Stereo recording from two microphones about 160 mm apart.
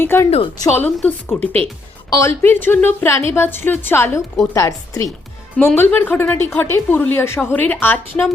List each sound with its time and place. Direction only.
0.0 s speech: 15° left (ahead or behind)